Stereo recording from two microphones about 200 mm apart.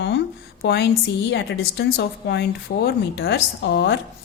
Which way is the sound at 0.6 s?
55° left (ahead or behind).